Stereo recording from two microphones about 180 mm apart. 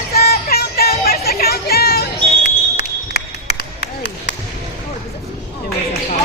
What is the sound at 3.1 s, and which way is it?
Run, 65° left (ahead or behind).